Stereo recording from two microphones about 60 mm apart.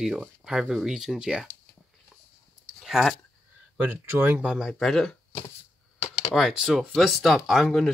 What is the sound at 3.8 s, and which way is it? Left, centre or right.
Speech, right.